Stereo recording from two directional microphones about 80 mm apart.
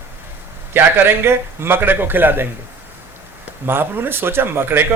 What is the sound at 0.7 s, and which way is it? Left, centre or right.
A man's voice, right.